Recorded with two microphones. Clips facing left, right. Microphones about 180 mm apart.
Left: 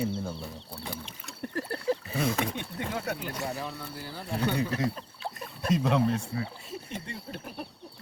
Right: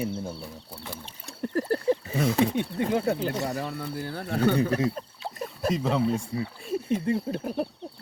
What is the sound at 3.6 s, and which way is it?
Speech, 60° right (ahead or behind).